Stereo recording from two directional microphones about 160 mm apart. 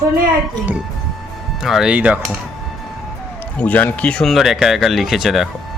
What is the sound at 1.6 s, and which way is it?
Speech, centre (ahead or behind).